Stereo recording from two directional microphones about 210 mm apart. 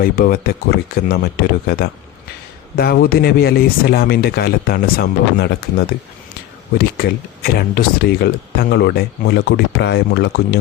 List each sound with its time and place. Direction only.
0.0 s speech: 45° left (ahead or behind)